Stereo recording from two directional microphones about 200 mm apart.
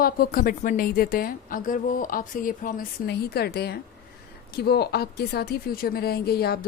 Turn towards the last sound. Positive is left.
turn(degrees=50)  # may be behind; listen again after turning